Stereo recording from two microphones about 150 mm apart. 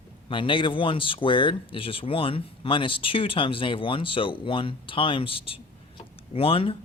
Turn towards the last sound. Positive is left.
turn(degrees=35)  # may be behind; listen again after turning